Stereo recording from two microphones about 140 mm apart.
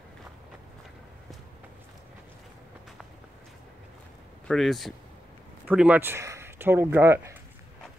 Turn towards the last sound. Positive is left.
turn(degrees=-15)  # may be behind; listen again after turning